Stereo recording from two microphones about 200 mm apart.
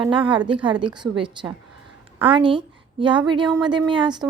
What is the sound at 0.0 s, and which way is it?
A woman's voice, 25° right (ahead or behind).